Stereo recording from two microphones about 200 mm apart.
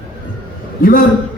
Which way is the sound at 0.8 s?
45° left (ahead or behind).